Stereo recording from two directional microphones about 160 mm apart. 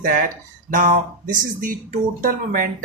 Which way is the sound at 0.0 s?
55° right (ahead or behind).